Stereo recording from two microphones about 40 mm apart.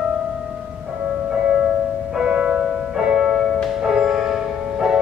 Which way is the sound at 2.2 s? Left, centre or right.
Right.